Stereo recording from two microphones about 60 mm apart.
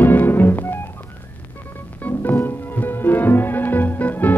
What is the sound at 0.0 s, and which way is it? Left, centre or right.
Music, left.